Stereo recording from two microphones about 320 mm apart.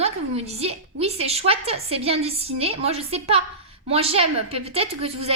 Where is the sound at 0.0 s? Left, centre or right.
Centre.